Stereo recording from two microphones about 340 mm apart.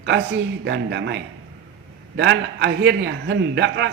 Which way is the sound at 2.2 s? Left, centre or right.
Right.